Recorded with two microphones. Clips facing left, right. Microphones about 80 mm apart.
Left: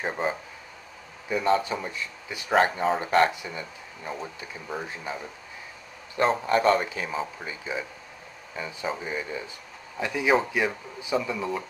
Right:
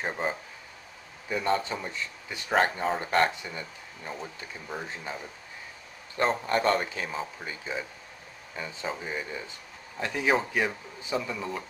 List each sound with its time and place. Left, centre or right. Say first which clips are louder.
0.0 s speech: left 3 dB; centre
11.1 s speech: left 4 dB; centre